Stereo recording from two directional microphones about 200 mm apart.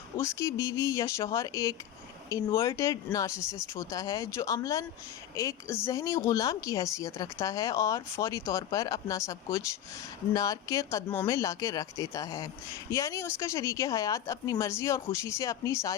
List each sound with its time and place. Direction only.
0.2 s speech: 15° left (ahead or behind)